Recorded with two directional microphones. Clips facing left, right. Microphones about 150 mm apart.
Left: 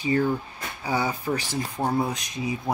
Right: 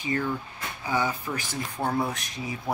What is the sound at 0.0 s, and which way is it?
Speech, 35° left (ahead or behind).